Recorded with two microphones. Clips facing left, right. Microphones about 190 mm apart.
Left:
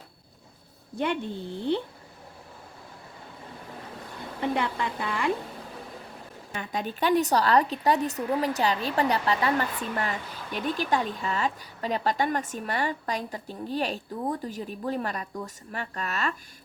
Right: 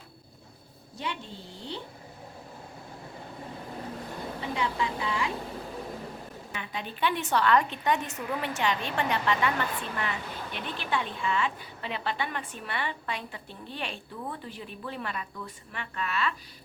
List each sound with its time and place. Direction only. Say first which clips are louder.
0.9 s a woman's voice: left 8 dB; 55° left (ahead or behind)
4.4 s speech: left 4 dB; 55° left (ahead or behind)
6.5 s a woman's voice: left 7 dB; 45° left (ahead or behind)